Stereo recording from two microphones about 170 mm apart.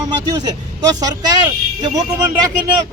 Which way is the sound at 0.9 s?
25° right (ahead or behind).